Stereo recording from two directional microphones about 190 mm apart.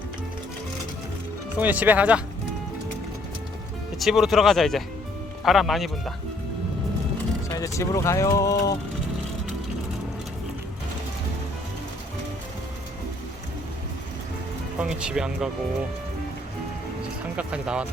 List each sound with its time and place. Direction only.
1.5 s speech: 10° right (ahead or behind)
3.9 s speech: centre (ahead or behind)
7.5 s speech: 15° left (ahead or behind)
14.8 s speech: 5° right (ahead or behind)
17.0 s music: 5° right (ahead or behind)